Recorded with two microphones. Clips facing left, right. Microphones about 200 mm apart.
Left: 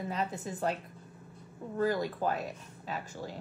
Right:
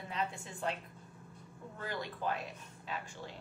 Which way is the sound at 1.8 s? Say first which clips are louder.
Left 10 dB; 40° left (ahead or behind).